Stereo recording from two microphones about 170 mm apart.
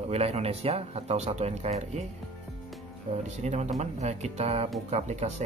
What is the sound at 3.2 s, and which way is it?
Speech, 40° right (ahead or behind).